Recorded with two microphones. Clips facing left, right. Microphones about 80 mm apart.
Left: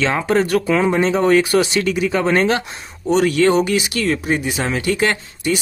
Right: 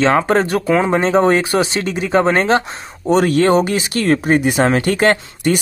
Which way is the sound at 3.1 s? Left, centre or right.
Right.